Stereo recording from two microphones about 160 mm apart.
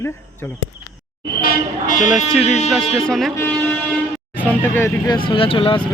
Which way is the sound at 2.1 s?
Centre (ahead or behind).